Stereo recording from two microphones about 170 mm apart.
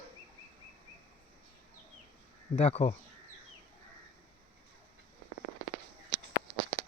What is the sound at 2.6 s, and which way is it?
Speech, 40° left (ahead or behind).